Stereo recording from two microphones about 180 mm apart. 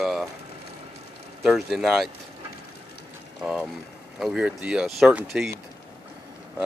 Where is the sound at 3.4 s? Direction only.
5° right (ahead or behind).